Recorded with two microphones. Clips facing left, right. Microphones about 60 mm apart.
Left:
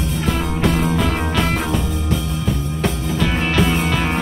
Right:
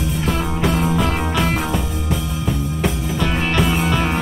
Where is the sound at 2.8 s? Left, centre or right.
Centre.